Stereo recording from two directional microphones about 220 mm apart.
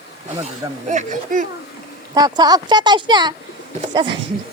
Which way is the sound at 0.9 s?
35° right (ahead or behind).